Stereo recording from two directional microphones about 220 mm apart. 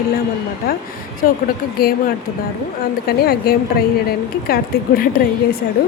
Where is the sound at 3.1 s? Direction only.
45° left (ahead or behind).